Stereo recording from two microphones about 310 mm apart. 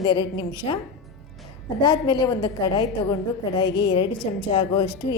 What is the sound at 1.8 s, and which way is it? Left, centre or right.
A woman's voice, centre.